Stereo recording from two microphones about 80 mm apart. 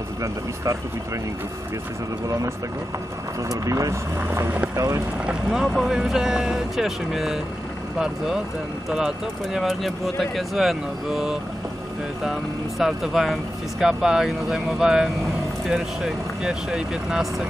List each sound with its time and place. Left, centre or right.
2.2 s speech: right
4.3 s speech: right
4.7 s speech: right
5.2 s speech: centre
8.9 s speech: centre